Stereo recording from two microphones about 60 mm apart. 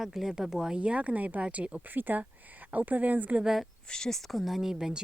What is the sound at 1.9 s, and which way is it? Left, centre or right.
Speech, right.